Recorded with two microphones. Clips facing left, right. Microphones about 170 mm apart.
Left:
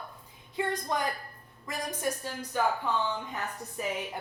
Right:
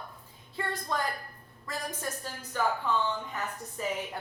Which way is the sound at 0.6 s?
15° left (ahead or behind).